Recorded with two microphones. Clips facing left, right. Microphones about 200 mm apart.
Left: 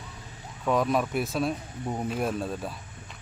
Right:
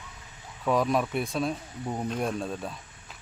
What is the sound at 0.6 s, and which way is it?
Speech, centre (ahead or behind).